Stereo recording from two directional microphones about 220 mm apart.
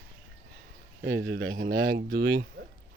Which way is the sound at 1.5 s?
40° right (ahead or behind).